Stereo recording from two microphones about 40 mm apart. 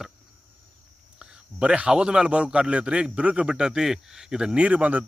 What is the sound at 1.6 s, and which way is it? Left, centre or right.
Speech, right.